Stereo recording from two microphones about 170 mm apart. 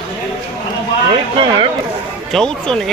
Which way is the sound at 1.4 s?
30° right (ahead or behind).